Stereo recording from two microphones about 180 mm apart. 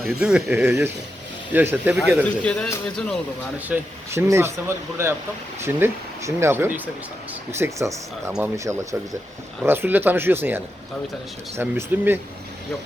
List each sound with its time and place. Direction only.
0.0 s speech: 5° right (ahead or behind)
2.4 s speech: 5° left (ahead or behind)
3.7 s speech: 15° right (ahead or behind)